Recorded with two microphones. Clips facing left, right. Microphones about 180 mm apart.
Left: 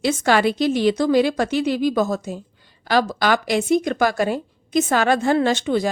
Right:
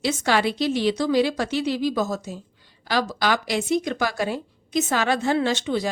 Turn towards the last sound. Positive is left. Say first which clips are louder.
# left 4 dB
turn(degrees=50)  # may be behind; listen again after turning